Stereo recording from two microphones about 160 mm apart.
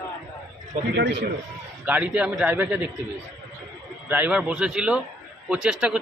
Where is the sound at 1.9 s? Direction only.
10° right (ahead or behind).